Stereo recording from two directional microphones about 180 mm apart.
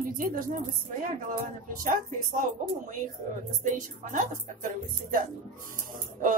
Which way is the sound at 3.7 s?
45° right (ahead or behind).